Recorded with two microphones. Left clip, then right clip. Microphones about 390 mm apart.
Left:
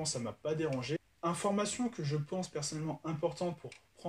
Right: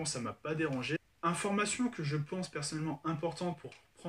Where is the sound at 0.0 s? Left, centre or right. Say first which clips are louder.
Left 1 dB; centre.